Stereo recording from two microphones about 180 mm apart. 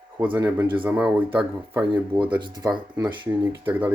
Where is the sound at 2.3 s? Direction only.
25° right (ahead or behind).